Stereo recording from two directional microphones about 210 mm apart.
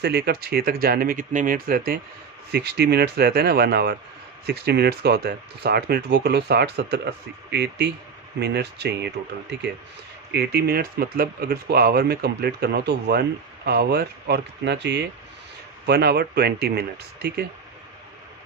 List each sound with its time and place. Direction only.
0.0 s speech: 50° right (ahead or behind)